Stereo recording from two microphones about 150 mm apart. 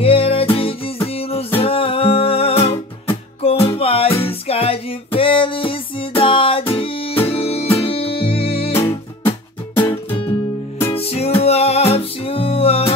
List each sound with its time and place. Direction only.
0.0 s music: 40° left (ahead or behind)
10.9 s music: 40° left (ahead or behind)